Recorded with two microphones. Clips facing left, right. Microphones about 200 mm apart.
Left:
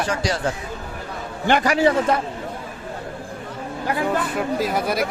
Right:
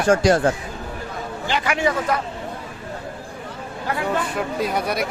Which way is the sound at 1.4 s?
55° left (ahead or behind).